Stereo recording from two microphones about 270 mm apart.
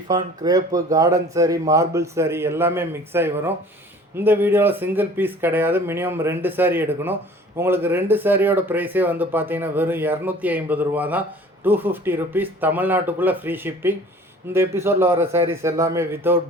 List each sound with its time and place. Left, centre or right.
0.1 s speech: centre